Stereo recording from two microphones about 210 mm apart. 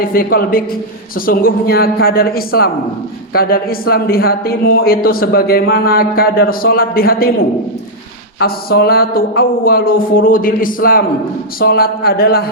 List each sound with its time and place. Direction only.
0.0 s speech: 45° left (ahead or behind)
8.4 s speech: 50° left (ahead or behind)